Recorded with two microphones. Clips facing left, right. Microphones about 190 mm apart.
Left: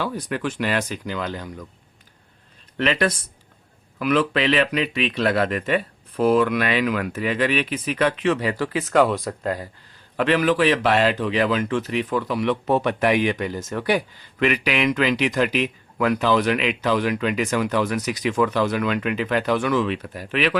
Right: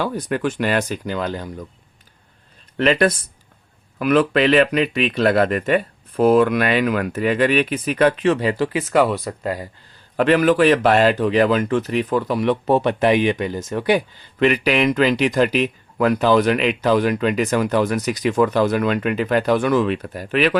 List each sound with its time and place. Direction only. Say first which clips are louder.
0.0 s speech: right 4 dB; 45° right (ahead or behind)
2.7 s speech: right 5 dB; 40° right (ahead or behind); by 8.8 s 20° right (ahead or behind)
8.9 s speech: left 1 dB; 5° right (ahead or behind)
10.2 s speech: right 4 dB; 45° right (ahead or behind); by 14.0 s 20° right (ahead or behind)
14.3 s speech: right 4 dB; 35° right (ahead or behind)